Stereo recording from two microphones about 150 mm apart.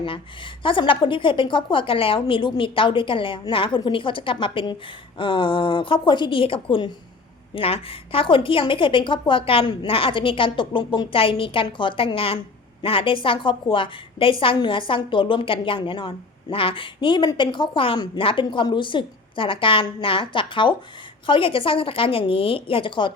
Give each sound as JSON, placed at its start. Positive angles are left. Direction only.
{"t": 0.0, "sound": "a woman's voice", "side_deg": 35}